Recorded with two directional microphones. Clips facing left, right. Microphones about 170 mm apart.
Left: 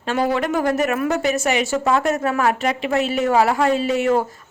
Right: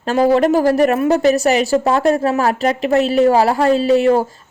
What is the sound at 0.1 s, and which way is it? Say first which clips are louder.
A woman's voice: right 7 dB; 35° right (ahead or behind).